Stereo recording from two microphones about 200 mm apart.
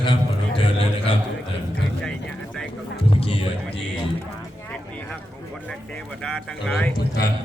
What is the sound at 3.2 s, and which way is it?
Speech, 30° left (ahead or behind).